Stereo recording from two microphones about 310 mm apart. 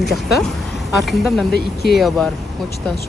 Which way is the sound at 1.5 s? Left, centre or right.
Left.